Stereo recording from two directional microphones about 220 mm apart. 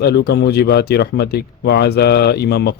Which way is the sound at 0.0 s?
45° left (ahead or behind).